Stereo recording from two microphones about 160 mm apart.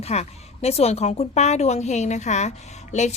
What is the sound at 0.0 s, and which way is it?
A woman's voice, 40° left (ahead or behind).